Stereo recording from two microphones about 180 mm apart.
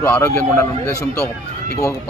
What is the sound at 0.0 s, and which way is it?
Speech, 10° left (ahead or behind).